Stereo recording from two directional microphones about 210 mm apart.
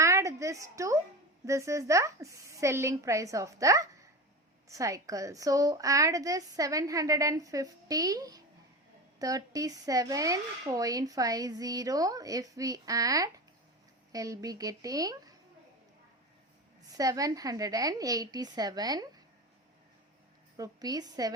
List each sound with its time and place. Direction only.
0.0 s a sound: 15° right (ahead or behind)
1.5 s a woman's voice: 15° right (ahead or behind)
16.8 s a woman's voice: 15° right (ahead or behind)
20.6 s a woman's voice: 20° right (ahead or behind)